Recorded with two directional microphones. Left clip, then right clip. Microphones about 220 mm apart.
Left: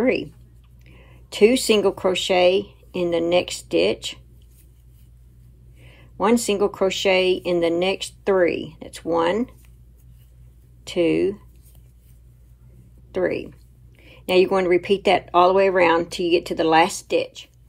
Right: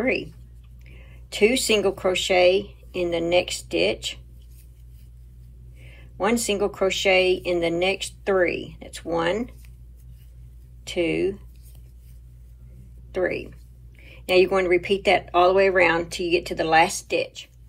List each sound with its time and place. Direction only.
0.0 s speech: 15° left (ahead or behind)
5.8 s speech: 15° left (ahead or behind)
10.8 s speech: 15° left (ahead or behind)
13.1 s speech: 15° left (ahead or behind)